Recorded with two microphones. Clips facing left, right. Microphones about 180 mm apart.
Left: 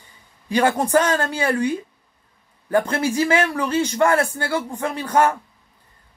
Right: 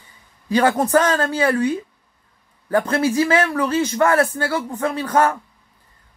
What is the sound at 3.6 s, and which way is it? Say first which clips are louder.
A man's voice: right 1 dB; 10° left (ahead or behind).